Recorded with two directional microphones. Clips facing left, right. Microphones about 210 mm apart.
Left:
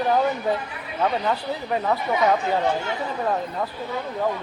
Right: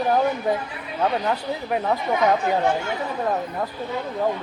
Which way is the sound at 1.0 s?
5° right (ahead or behind).